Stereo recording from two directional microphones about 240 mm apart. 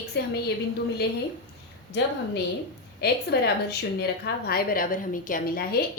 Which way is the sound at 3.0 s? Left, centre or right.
Left.